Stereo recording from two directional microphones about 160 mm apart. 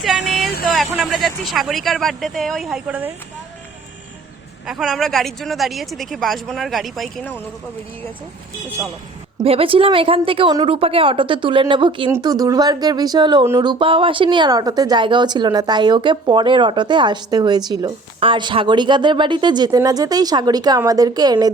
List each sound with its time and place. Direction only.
0.0 s vehicle: centre (ahead or behind)
0.7 s speech: centre (ahead or behind)
4.6 s speech: centre (ahead or behind)
9.4 s speech: 35° right (ahead or behind)
13.4 s speech: 15° right (ahead or behind)
13.7 s speech: 30° right (ahead or behind)